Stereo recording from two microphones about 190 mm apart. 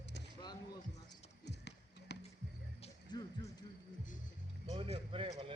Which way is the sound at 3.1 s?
15° left (ahead or behind).